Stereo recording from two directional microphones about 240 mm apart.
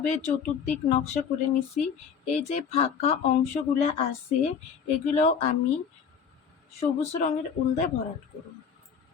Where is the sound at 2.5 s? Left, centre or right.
Left.